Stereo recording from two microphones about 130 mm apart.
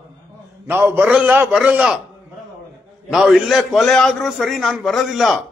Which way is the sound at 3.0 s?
Centre (ahead or behind).